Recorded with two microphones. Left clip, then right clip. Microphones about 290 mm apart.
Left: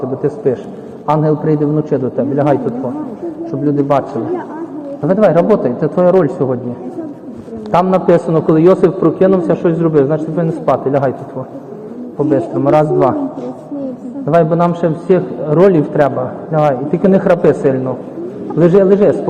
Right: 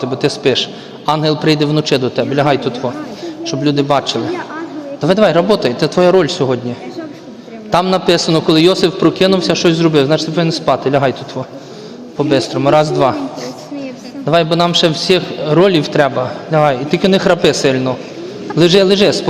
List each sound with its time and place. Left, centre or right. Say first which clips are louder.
0.2 s a man's voice: right 4 dB; right
5.0 s a man's voice: even; right
7.7 s a man's voice: left 1 dB; right
14.3 s a man's voice: left 1 dB; right